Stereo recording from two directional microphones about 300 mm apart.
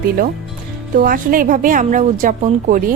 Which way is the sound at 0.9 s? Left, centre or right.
Right.